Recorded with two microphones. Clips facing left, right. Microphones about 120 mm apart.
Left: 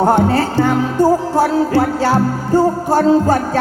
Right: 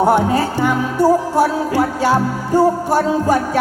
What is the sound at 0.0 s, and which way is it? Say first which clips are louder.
Music: left 1 dB; 15° right (ahead or behind).